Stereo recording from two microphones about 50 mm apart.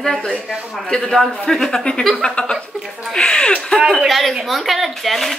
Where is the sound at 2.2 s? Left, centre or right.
Centre.